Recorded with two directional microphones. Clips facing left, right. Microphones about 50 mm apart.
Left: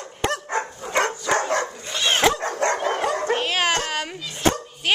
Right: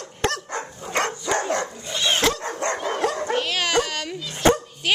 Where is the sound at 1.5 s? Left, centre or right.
Left.